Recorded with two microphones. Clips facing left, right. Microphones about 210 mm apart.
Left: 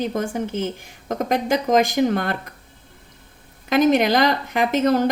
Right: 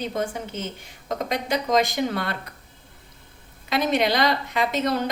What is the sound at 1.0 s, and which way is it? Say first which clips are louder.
A woman's voice: left 5 dB; 50° left (ahead or behind).